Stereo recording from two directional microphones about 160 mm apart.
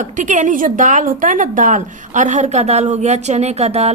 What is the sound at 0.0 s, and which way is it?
A woman's voice, 50° right (ahead or behind).